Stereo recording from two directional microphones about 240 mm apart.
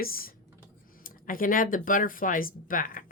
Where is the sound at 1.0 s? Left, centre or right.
Left.